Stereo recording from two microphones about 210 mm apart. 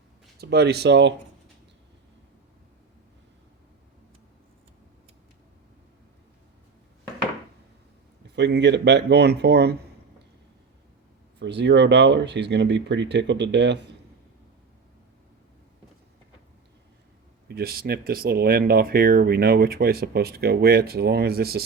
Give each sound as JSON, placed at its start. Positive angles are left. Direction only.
{"t": 0.3, "sound": "speech", "side_deg": -50}
{"t": 8.4, "sound": "speech", "side_deg": -55}
{"t": 11.3, "sound": "speech", "side_deg": -55}
{"t": 17.5, "sound": "speech", "side_deg": -45}